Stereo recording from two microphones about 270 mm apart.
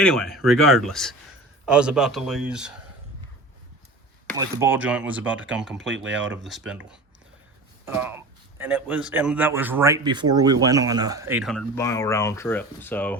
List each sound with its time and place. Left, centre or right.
0.0 s speech: centre
4.4 s speech: centre
5.8 s speech: right
6.3 s a man's voice: centre